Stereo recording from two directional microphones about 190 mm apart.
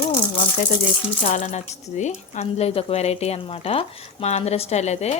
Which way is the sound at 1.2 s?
40° left (ahead or behind).